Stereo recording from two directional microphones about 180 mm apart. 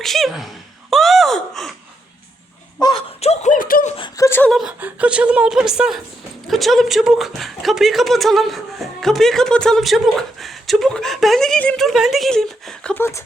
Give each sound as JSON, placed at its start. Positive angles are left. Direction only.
{"t": 0.0, "sound": "speech", "side_deg": 0}
{"t": 2.8, "sound": "speech", "side_deg": 30}
{"t": 3.9, "sound": "speech", "side_deg": 25}
{"t": 4.3, "sound": "speech", "side_deg": 10}
{"t": 4.5, "sound": "speech", "side_deg": -5}